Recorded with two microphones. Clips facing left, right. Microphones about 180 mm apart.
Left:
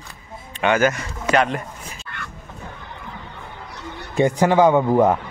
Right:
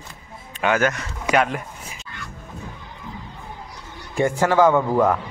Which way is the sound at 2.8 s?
65° left (ahead or behind).